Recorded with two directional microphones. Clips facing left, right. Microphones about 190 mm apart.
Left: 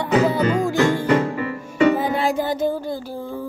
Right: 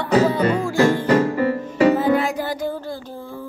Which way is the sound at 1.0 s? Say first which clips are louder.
Right 2 dB; 40° right (ahead or behind).